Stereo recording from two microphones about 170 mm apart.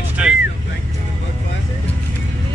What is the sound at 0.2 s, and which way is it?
Vehicle, 5° right (ahead or behind).